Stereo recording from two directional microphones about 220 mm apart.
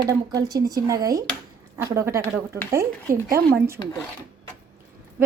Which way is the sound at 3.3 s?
10° right (ahead or behind).